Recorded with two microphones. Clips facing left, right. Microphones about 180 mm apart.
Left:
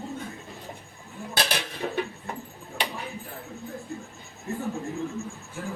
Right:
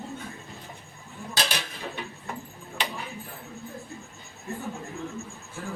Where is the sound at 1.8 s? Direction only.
40° left (ahead or behind).